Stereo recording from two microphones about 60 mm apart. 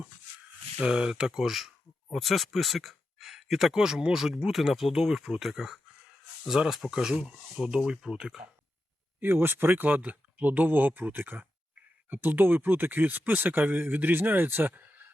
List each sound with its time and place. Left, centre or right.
0.8 s speech: centre
9.2 s speech: right